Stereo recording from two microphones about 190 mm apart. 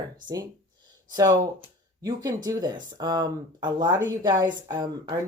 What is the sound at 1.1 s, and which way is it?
A woman's voice, 20° right (ahead or behind).